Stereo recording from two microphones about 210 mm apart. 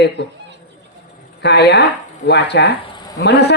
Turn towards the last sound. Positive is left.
turn(degrees=55)  # may be behind; listen again after turning